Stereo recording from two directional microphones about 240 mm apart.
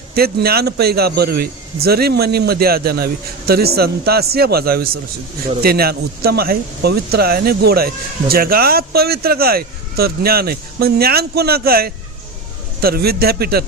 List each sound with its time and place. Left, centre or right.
0.1 s speech: right